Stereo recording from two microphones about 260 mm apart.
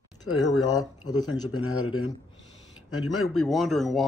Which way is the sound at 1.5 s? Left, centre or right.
Left.